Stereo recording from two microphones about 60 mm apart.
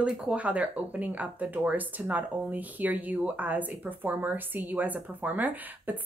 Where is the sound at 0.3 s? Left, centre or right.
Right.